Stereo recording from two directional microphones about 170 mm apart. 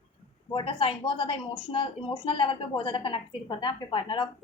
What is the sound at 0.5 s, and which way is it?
A woman's voice, 30° left (ahead or behind).